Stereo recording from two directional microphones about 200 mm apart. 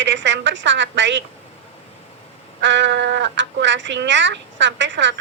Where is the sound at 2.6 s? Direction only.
65° right (ahead or behind).